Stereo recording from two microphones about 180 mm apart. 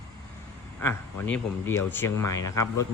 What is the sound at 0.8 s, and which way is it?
Speech, 10° left (ahead or behind).